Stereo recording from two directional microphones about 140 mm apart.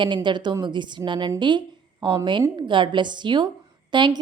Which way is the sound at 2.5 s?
35° right (ahead or behind).